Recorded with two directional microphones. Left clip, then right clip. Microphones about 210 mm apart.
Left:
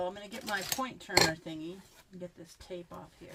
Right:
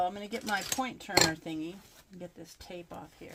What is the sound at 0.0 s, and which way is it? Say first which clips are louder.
Speech: right 5 dB; 40° right (ahead or behind).